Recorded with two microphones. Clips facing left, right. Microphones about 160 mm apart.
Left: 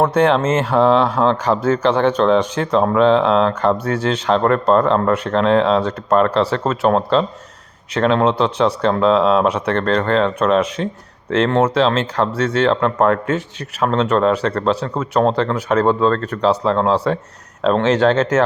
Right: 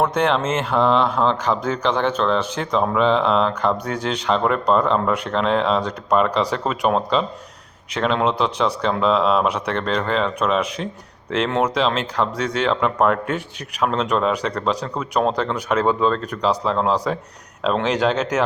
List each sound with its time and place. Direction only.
0.0 s speech: 10° left (ahead or behind)
2.3 s speech: centre (ahead or behind)
3.8 s speech: 10° right (ahead or behind)